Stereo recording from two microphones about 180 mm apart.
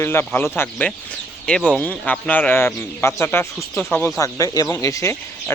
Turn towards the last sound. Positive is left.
turn(degrees=15)  # may be behind; listen again after turning